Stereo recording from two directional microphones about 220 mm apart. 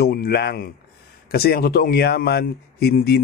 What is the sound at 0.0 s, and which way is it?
Speech, 45° left (ahead or behind).